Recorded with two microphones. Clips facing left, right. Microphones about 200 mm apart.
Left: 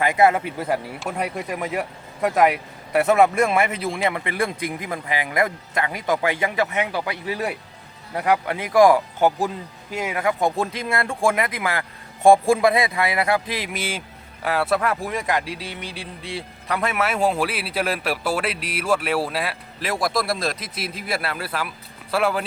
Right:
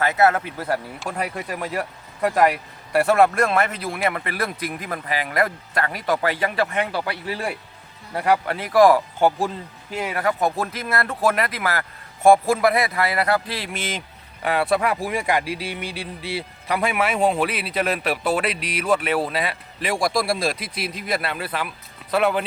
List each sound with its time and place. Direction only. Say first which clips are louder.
0.0 s a man's voice: left 1 dB; 10° left (ahead or behind)
9.9 s a man's voice: even; 10° left (ahead or behind)